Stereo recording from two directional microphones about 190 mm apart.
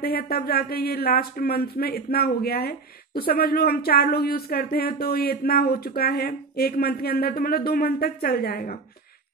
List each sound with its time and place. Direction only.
0.0 s speech: 55° left (ahead or behind)